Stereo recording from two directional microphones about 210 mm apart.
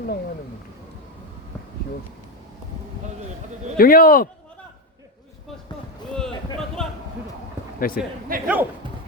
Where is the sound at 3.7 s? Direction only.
45° left (ahead or behind).